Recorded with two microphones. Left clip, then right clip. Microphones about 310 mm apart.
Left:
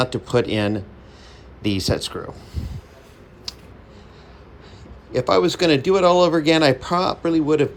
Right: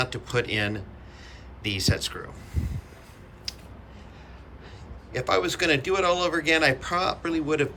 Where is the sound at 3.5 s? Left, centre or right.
Centre.